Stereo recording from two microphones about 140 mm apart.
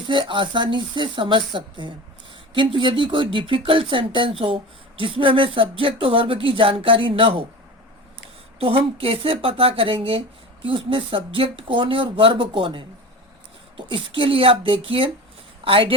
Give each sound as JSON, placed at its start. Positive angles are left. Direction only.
{"t": 0.0, "sound": "speech", "side_deg": -35}
{"t": 8.5, "sound": "speech", "side_deg": -45}